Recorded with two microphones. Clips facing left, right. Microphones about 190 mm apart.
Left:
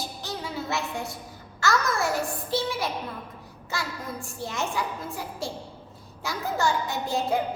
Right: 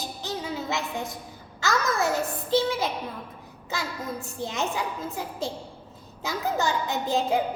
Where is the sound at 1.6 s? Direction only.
20° right (ahead or behind).